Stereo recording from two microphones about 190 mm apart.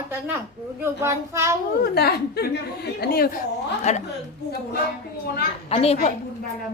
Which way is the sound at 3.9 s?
35° left (ahead or behind).